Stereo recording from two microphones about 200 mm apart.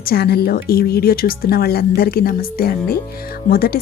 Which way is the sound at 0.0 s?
50° left (ahead or behind).